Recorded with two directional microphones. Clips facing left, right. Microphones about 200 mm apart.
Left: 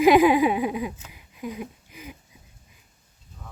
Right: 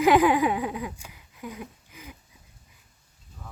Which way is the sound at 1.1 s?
15° left (ahead or behind).